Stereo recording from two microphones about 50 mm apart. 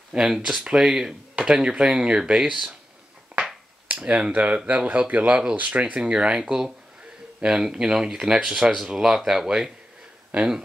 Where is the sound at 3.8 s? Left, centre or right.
Right.